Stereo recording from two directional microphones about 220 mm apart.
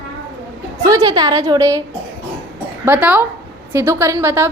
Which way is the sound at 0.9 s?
15° right (ahead or behind).